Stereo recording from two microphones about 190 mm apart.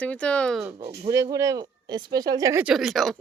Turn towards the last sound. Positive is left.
turn(degrees=0)  # may be behind; listen again after turning